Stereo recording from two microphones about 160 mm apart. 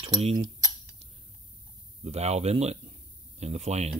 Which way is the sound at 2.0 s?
40° right (ahead or behind).